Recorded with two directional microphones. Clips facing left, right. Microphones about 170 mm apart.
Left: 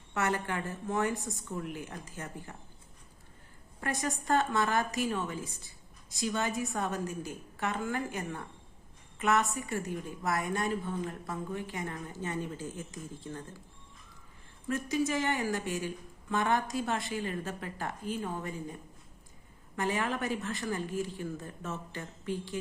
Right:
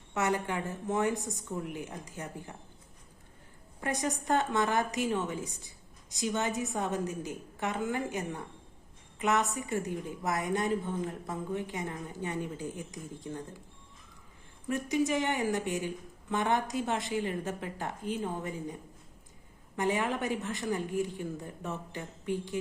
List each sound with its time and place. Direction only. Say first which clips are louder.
0.1 s a woman's voice: right 1 dB; 15° right (ahead or behind)
3.8 s a woman's voice: right 2 dB; 20° right (ahead or behind)
14.7 s a woman's voice: right 2 dB; 20° right (ahead or behind)